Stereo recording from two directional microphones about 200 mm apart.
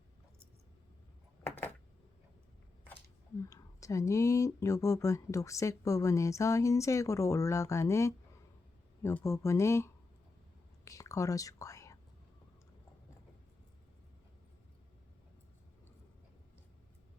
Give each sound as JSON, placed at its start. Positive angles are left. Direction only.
{"t": 3.5, "sound": "speech", "side_deg": 15}